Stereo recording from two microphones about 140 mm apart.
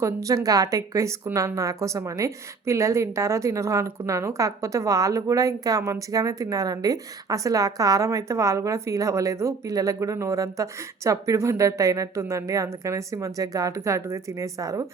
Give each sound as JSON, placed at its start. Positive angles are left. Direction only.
{"t": 0.0, "sound": "a woman's voice", "side_deg": -25}